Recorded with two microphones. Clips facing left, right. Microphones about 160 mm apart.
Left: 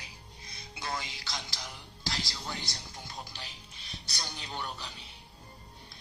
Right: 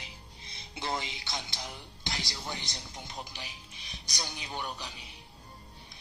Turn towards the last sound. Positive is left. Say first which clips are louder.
# right 1 dB
turn(degrees=-15)  # may be behind; listen again after turning